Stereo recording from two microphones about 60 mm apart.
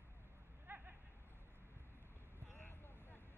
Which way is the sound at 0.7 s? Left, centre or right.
Right.